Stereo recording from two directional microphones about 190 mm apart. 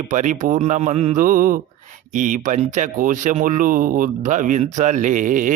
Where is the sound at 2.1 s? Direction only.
45° right (ahead or behind).